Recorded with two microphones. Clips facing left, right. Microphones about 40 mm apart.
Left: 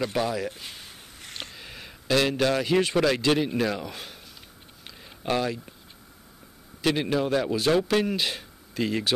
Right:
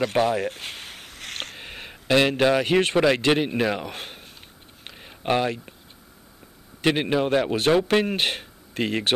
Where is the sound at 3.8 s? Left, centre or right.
Right.